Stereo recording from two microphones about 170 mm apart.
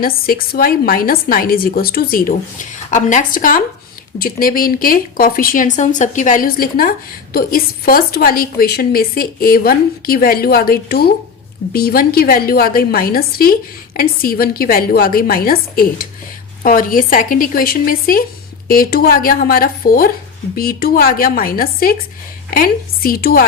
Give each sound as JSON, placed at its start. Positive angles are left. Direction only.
{"t": 0.0, "sound": "a woman's voice", "side_deg": 60}